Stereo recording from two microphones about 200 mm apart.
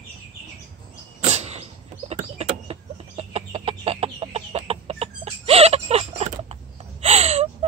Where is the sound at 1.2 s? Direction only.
35° right (ahead or behind).